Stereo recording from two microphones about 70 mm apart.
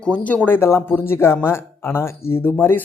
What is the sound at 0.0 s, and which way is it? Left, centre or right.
Speech, centre.